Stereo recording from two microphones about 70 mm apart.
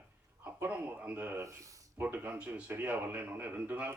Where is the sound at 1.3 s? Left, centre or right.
Right.